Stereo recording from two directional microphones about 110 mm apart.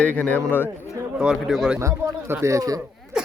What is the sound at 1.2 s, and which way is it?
Speech, 5° right (ahead or behind).